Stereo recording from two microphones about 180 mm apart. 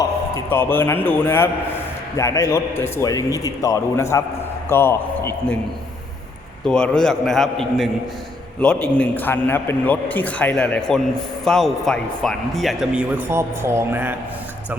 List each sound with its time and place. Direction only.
0.3 s a man's voice: 10° left (ahead or behind)
6.7 s a man's voice: 5° left (ahead or behind); by 14.2 s 10° right (ahead or behind)